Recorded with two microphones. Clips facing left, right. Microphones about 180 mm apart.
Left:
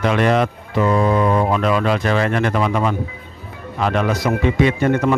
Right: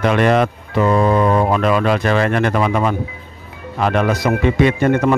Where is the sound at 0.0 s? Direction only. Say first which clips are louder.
Right 2 dB; 55° right (ahead or behind).